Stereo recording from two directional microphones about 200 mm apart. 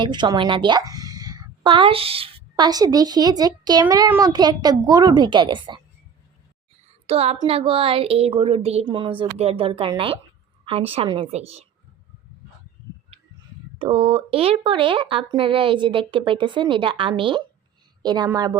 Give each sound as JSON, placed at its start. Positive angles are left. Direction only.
{"t": 0.0, "sound": "a woman's voice", "side_deg": -20}
{"t": 7.1, "sound": "speech", "side_deg": -30}
{"t": 13.7, "sound": "a woman's voice", "side_deg": -30}